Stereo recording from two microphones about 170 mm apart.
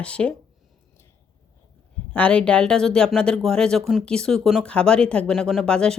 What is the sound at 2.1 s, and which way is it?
Speech, 5° left (ahead or behind).